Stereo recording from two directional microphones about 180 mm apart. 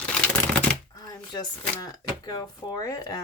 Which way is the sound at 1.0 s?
20° left (ahead or behind).